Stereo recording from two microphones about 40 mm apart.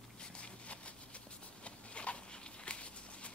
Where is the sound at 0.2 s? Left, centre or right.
Left.